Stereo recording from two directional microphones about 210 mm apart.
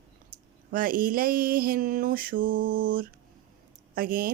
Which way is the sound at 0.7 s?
40° right (ahead or behind).